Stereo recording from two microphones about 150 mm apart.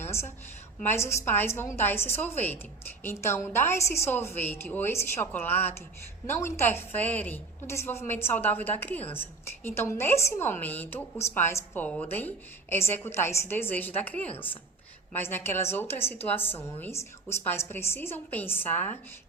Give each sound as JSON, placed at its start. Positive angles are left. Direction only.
{"t": 0.0, "sound": "a woman's voice", "side_deg": 15}